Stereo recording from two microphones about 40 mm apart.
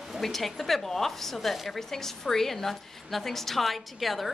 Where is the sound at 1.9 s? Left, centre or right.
Centre.